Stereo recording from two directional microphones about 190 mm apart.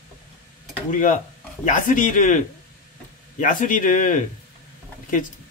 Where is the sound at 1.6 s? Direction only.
40° left (ahead or behind).